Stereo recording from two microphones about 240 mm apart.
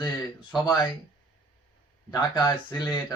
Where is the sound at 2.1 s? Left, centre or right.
Centre.